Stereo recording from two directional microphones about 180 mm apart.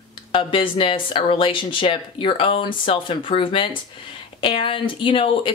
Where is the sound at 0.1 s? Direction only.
30° left (ahead or behind).